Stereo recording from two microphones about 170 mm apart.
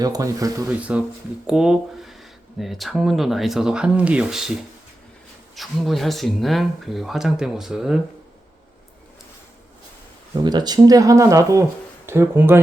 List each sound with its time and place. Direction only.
0.0 s speech: 20° right (ahead or behind)
0.8 s speech: 5° right (ahead or behind)
5.5 s speech: centre (ahead or behind)
10.3 s speech: 25° right (ahead or behind)